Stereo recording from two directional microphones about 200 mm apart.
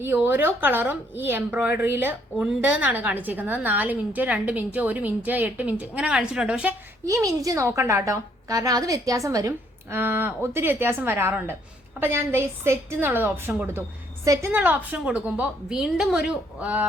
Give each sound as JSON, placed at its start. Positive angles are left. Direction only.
{"t": 0.0, "sound": "speech", "side_deg": -10}
{"t": 7.0, "sound": "a woman's voice", "side_deg": -15}